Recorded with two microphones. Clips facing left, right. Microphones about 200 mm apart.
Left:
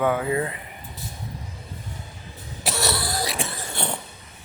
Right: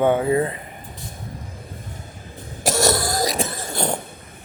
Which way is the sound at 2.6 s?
45° right (ahead or behind).